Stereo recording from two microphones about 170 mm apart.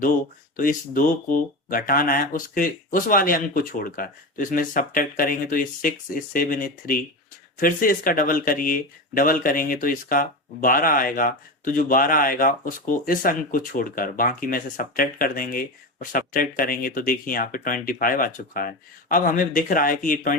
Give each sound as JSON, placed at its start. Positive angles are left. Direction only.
{"t": 0.5, "sound": "speech", "side_deg": 55}